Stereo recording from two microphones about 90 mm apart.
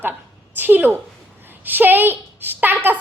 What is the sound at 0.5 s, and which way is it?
A woman's voice, 20° right (ahead or behind).